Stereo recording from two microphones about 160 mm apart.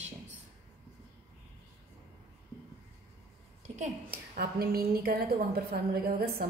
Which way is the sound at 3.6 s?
45° right (ahead or behind).